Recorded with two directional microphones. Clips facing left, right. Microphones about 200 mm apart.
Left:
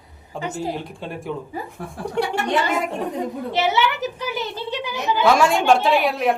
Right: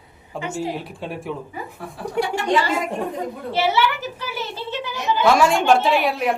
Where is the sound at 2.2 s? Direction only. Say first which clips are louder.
Even; 5° right (ahead or behind).